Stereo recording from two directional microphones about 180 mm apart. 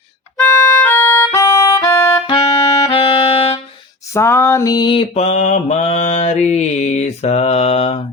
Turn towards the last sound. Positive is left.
turn(degrees=35)  # may be behind; listen again after turning